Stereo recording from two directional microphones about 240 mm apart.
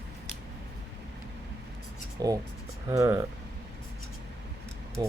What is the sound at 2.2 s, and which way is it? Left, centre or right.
Speech, centre.